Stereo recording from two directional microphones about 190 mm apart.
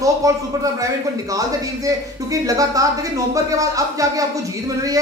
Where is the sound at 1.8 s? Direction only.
15° right (ahead or behind).